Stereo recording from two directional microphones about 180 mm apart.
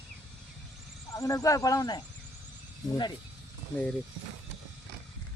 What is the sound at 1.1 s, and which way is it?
Speech, 15° left (ahead or behind).